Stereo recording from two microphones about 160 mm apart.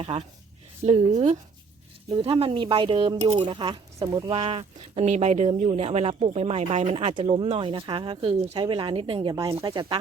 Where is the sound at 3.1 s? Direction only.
45° right (ahead or behind).